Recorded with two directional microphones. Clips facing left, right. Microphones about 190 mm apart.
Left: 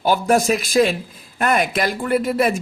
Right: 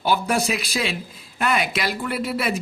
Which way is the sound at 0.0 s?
45° left (ahead or behind).